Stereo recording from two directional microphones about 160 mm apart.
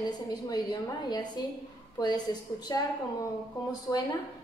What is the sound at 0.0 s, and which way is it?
A woman's voice, 25° left (ahead or behind).